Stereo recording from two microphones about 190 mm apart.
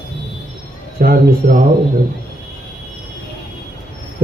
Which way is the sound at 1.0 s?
50° right (ahead or behind).